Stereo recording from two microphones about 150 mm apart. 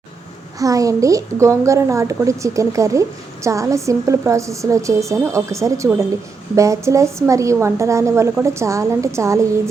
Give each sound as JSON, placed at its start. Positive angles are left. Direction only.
{"t": 0.6, "sound": "a woman's voice", "side_deg": -20}